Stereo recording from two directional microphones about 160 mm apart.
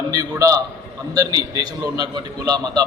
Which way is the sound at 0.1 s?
20° right (ahead or behind).